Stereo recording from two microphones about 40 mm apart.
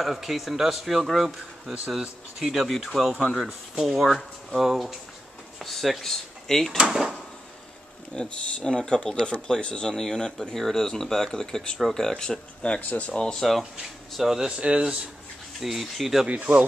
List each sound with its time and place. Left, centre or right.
0.0 s speech: centre
2.9 s speech: centre
4.1 s speech: centre
4.6 s speech: centre
6.8 s speech: centre
8.1 s speech: left
9.9 s speech: centre; by 13.1 s left
13.1 s speech: centre
13.4 s speech: centre
14.2 s speech: centre
14.6 s a man's voice: right
15.6 s speech: centre
16.3 s speech: right